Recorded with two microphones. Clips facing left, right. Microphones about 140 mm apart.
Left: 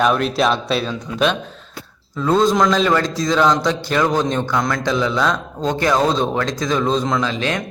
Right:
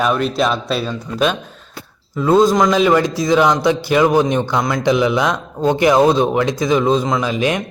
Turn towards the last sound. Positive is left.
turn(degrees=-15)  # may be behind; listen again after turning